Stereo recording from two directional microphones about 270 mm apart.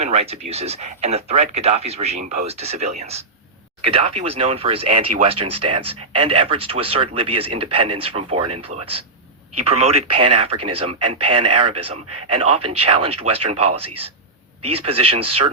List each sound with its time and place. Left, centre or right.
0.0 s speech: right
4.9 s speech: right
5.2 s speech: right
14.8 s speech: right